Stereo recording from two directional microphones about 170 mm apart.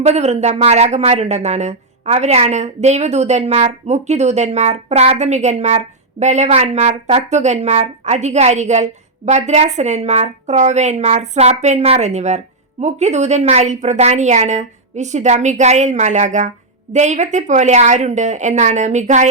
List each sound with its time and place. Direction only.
0.0 s a woman's voice: 40° right (ahead or behind)